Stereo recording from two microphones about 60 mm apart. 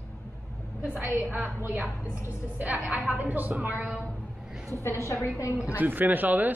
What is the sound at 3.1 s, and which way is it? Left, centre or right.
Speech, right.